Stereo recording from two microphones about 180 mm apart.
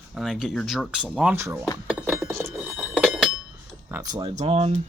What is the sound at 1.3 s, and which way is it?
Speech, 15° right (ahead or behind).